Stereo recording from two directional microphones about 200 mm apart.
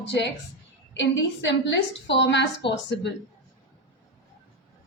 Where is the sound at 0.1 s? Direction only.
60° left (ahead or behind).